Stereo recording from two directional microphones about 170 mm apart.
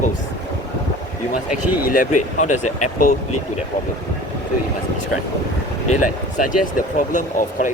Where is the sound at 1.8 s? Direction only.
55° left (ahead or behind).